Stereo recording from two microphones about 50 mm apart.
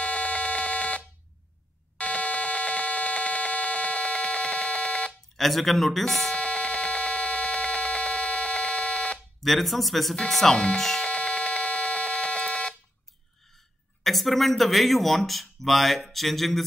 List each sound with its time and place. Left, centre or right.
0.0 s buzzer: left
2.0 s a sound: left
5.4 s speech: centre
6.3 s a sound: left
9.4 s speech: centre
11.1 s buzzer: left
14.0 s a woman's voice: centre